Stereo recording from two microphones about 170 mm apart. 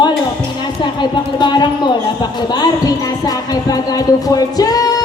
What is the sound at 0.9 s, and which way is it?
Speech, 25° left (ahead or behind).